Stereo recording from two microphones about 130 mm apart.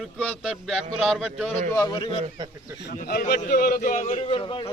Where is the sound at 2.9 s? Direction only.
80° left.